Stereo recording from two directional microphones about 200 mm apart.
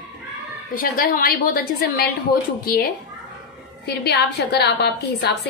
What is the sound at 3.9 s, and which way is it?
A woman's voice, 55° left (ahead or behind).